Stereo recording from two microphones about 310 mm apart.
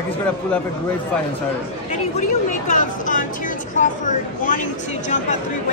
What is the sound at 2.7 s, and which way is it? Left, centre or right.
Speech, left.